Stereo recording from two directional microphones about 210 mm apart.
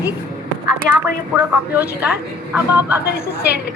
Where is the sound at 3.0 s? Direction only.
50° left (ahead or behind).